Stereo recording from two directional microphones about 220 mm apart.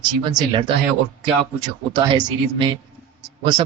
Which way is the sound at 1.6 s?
20° right (ahead or behind).